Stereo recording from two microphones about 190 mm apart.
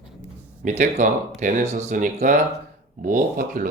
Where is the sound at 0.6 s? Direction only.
40° right (ahead or behind).